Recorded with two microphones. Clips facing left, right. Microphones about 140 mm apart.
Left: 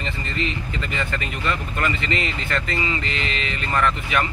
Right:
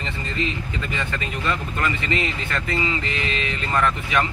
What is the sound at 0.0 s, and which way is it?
Speech, 20° right (ahead or behind).